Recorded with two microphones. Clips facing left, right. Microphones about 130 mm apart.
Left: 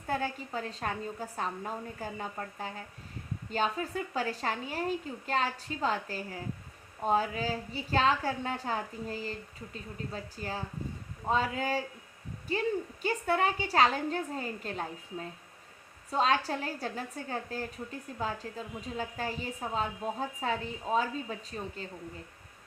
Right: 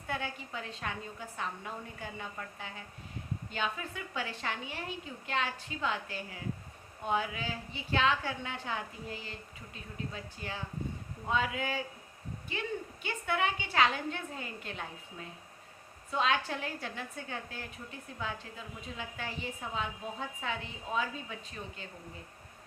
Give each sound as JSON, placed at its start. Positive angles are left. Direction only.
{"t": 0.1, "sound": "a woman's voice", "side_deg": 40}